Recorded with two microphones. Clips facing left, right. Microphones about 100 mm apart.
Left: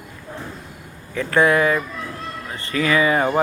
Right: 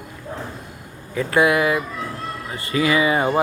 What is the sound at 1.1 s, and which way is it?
Speech, 15° right (ahead or behind).